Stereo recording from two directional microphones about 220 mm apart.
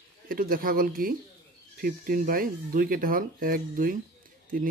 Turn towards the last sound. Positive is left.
turn(degrees=-40)  # may be behind; listen again after turning